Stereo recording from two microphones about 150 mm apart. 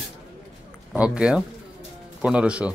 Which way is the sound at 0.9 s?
5° right (ahead or behind).